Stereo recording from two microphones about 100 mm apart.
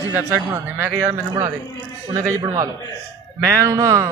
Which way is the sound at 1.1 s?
45° right (ahead or behind).